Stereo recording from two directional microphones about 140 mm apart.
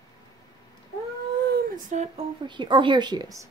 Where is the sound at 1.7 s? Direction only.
60° right (ahead or behind).